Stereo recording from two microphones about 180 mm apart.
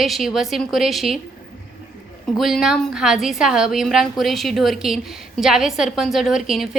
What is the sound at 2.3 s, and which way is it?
A woman's voice, centre (ahead or behind).